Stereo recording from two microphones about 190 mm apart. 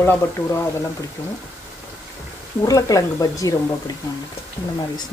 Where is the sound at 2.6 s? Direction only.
20° left (ahead or behind).